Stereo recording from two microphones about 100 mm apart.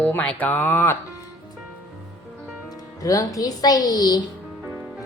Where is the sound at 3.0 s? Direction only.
35° left (ahead or behind).